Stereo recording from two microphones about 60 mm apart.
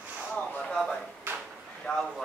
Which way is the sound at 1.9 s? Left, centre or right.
Centre.